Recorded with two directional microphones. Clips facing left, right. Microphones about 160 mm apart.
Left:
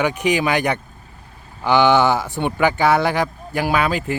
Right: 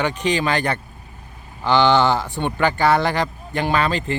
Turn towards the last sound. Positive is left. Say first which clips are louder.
# left 1 dB
turn(degrees=10)  # may be behind; listen again after turning